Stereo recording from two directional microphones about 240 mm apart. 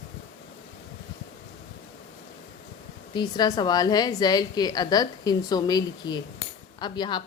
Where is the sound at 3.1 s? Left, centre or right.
Centre.